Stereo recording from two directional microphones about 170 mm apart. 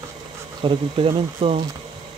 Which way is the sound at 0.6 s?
30° right (ahead or behind).